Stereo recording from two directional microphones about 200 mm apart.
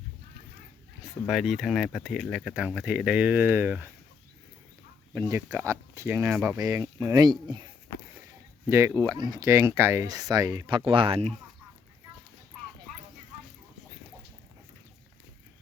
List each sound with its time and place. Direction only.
1.3 s speech: centre (ahead or behind)
5.1 s speech: 15° right (ahead or behind)
8.7 s speech: 15° right (ahead or behind)